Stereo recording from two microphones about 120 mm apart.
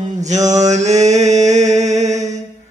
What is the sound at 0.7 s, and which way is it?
Mantra, 75° right (ahead or behind).